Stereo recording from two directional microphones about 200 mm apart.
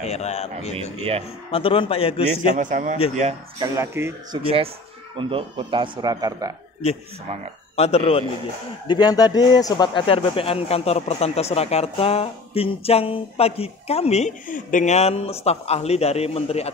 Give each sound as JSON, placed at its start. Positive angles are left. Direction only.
{"t": 0.0, "sound": "a man's voice", "side_deg": 35}
{"t": 2.3, "sound": "a man's voice", "side_deg": -40}
{"t": 3.5, "sound": "speech", "side_deg": -15}
{"t": 4.4, "sound": "speech", "side_deg": -25}
{"t": 7.7, "sound": "a man's voice", "side_deg": 30}